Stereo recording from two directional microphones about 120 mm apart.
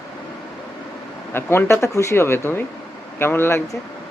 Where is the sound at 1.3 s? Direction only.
20° left (ahead or behind).